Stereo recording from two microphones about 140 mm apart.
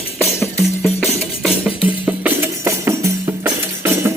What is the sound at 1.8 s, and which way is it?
Music, 10° right (ahead or behind).